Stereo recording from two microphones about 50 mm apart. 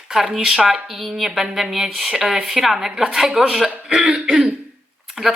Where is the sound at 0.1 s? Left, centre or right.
Centre.